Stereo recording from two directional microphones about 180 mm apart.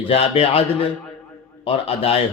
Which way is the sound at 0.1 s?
35° left (ahead or behind).